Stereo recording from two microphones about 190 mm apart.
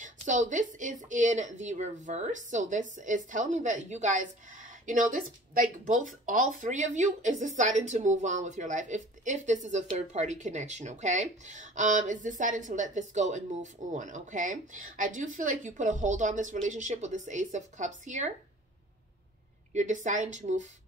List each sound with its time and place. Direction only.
0.0 s speech: 40° right (ahead or behind)
19.7 s speech: 40° right (ahead or behind)